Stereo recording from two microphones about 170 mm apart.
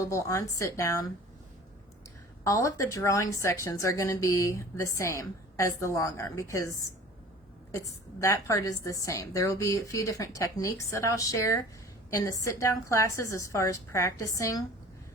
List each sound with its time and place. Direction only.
0.0 s a woman's voice: 20° left (ahead or behind)
2.4 s a woman's voice: 20° left (ahead or behind)